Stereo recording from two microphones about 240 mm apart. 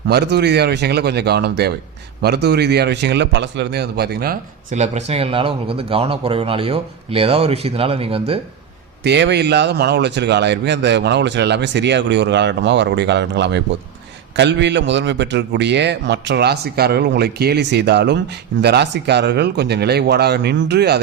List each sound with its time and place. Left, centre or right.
0.1 s a man's voice: right
9.0 s speech: right